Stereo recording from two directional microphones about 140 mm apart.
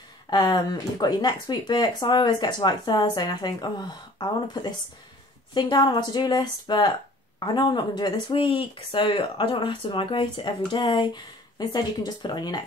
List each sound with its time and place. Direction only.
0.3 s speech: 30° left (ahead or behind)